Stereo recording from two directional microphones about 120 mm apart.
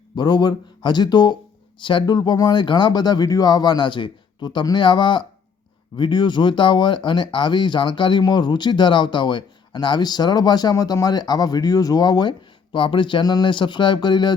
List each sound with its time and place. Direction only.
0.2 s speech: 35° left (ahead or behind)